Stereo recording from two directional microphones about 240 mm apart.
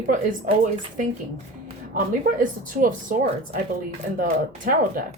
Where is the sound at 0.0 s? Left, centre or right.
Right.